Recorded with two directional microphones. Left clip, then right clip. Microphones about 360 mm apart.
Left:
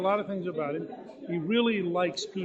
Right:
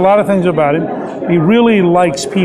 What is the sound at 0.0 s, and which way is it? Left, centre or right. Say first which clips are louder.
Speech: right 18 dB; centre.